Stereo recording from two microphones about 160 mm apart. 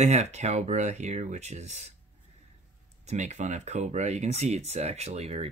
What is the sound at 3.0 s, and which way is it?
Speech, 45° right (ahead or behind).